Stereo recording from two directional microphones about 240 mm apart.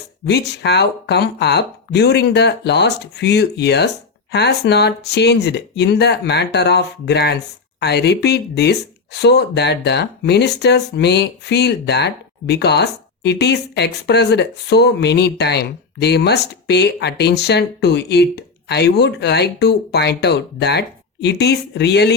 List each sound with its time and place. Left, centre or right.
0.3 s speech: left